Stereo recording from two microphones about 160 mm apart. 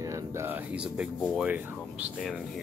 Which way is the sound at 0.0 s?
20° right (ahead or behind).